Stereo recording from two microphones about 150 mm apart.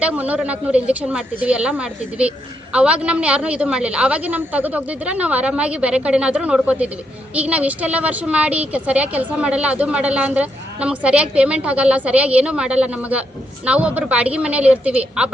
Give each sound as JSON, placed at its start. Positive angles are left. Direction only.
{"t": 0.0, "sound": "a woman's voice", "side_deg": -10}